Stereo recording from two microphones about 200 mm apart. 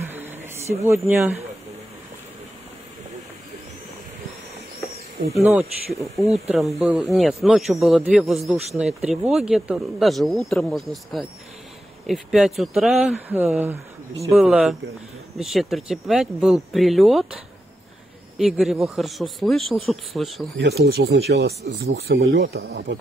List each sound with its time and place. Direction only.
0.0 s a sound: 10° right (ahead or behind)
0.7 s speech: 15° right (ahead or behind)
5.3 s speech: centre (ahead or behind)
18.4 s speech: centre (ahead or behind)
20.5 s speech: 55° right (ahead or behind)